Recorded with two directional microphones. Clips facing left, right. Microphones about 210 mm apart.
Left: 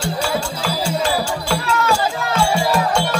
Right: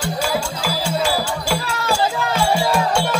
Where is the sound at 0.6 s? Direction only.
10° right (ahead or behind).